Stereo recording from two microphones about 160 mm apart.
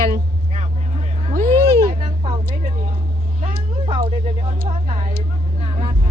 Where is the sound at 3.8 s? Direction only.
35° right (ahead or behind).